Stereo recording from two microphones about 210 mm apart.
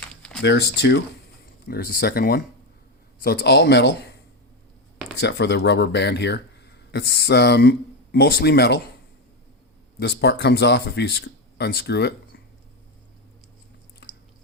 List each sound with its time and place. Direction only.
0.1 s a sound: 5° left (ahead or behind)
1.6 s speech: 45° left (ahead or behind)
5.2 s speech: 55° left (ahead or behind)
10.0 s speech: 55° left (ahead or behind)